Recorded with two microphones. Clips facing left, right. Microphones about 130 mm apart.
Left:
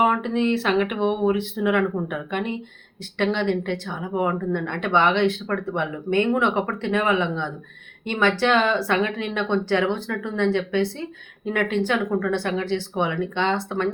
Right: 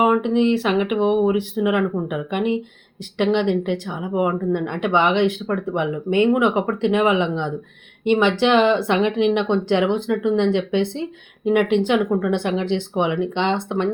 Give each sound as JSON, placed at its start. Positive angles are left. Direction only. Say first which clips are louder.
{"t": 0.0, "sound": "speech", "louder": "right 4 dB", "side_deg": -10}